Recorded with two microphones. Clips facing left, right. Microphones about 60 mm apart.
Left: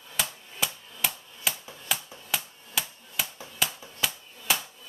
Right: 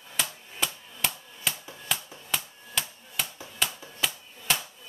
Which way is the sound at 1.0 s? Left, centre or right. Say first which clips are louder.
Even; centre.